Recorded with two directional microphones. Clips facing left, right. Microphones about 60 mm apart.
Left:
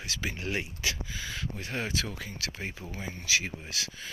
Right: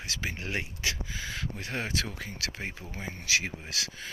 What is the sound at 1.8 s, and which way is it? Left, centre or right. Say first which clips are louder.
Speech: even; right.